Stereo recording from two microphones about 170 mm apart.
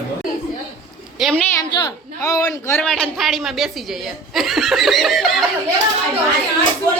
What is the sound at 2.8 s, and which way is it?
Speech, 5° left (ahead or behind).